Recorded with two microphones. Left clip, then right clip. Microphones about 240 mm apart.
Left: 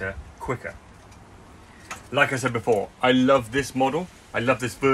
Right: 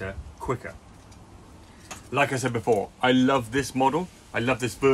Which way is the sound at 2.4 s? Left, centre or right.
Centre.